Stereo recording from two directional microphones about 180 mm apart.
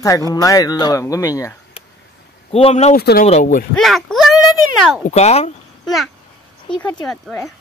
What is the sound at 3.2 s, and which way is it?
Speech, 40° left (ahead or behind).